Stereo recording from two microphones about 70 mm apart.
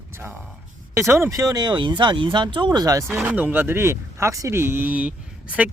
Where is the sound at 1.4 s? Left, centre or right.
Right.